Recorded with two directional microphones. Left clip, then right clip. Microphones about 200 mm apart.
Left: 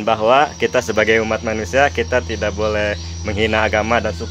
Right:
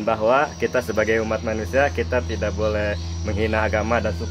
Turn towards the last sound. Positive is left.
turn(degrees=30)  # may be behind; listen again after turning